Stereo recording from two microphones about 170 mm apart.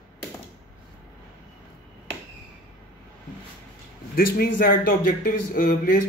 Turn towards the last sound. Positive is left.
turn(degrees=60)  # may be behind; listen again after turning